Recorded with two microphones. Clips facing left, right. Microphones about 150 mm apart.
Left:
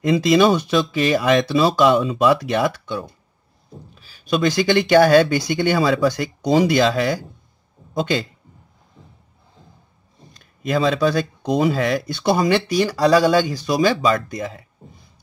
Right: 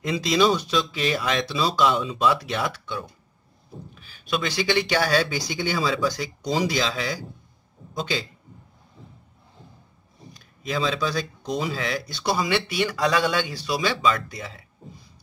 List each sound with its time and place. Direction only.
0.1 s speech: 55° left (ahead or behind)
10.6 s speech: 55° left (ahead or behind)